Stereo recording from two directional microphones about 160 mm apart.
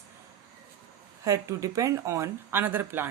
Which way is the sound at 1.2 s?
20° right (ahead or behind).